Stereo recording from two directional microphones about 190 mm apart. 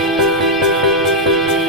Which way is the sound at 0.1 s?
Centre (ahead or behind).